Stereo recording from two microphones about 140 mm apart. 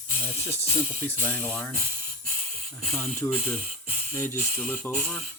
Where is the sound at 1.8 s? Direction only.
90° right.